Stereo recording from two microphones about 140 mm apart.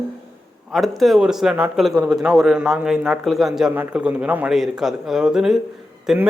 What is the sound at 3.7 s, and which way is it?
A man's voice, 10° right (ahead or behind).